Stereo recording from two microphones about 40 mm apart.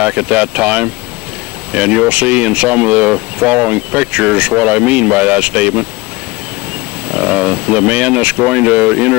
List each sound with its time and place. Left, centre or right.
0.0 s speech: right
7.1 s speech: right